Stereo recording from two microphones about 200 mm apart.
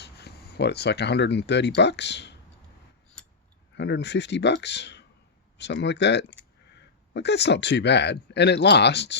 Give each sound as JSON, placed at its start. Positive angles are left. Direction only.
{"t": 0.0, "sound": "speech", "side_deg": 55}
{"t": 3.8, "sound": "speech", "side_deg": 60}